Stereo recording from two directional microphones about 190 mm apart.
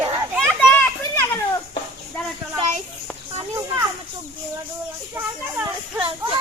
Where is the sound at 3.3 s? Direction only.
15° right (ahead or behind).